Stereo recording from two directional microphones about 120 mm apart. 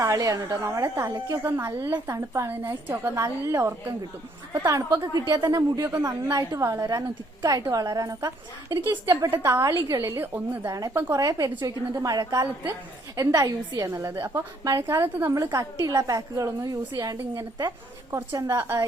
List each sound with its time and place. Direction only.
0.0 s a woman's voice: 25° right (ahead or behind)